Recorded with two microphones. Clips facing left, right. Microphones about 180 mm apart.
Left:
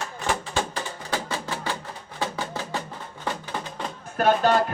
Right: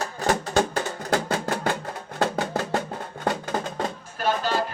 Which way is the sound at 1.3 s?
55° right (ahead or behind).